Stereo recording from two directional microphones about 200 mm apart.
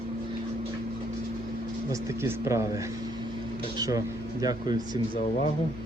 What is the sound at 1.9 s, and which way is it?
Speech, 15° right (ahead or behind).